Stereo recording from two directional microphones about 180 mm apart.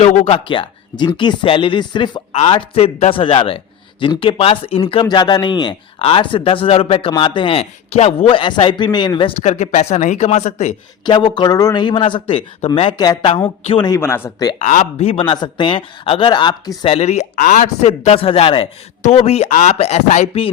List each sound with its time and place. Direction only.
0.0 s speech: 30° left (ahead or behind)
11.0 s speech: 25° left (ahead or behind)
14.6 s speech: 40° left (ahead or behind)